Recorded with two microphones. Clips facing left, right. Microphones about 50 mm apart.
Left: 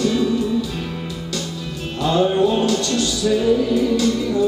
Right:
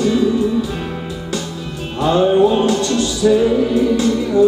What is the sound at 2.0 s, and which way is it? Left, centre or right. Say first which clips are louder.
Music: right 4 dB; centre.